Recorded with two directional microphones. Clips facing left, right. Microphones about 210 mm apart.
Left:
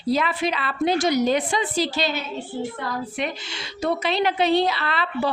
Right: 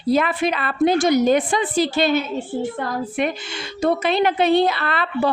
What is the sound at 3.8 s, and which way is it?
Speech, 50° right (ahead or behind).